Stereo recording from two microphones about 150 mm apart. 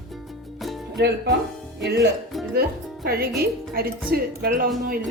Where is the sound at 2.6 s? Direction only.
90° right.